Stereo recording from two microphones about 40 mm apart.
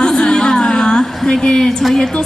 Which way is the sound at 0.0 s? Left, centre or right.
Centre.